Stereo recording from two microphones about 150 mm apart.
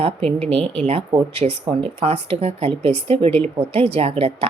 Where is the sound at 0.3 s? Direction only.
40° right (ahead or behind).